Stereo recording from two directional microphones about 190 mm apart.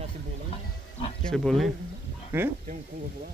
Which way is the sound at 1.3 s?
Centre (ahead or behind).